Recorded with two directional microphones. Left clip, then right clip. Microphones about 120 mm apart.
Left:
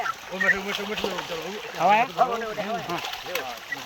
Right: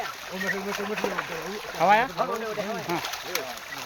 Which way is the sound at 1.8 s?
35° right (ahead or behind).